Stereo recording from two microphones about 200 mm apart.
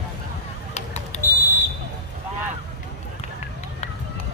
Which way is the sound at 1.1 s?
35° left (ahead or behind).